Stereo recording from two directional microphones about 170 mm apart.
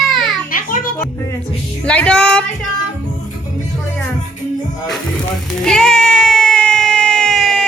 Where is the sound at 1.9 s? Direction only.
5° left (ahead or behind).